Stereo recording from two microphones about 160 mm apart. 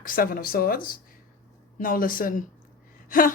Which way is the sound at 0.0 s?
60° left (ahead or behind).